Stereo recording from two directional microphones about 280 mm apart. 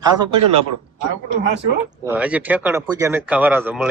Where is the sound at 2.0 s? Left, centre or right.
Centre.